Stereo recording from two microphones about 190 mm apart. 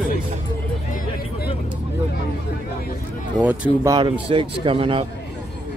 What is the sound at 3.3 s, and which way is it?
Speech, 5° right (ahead or behind).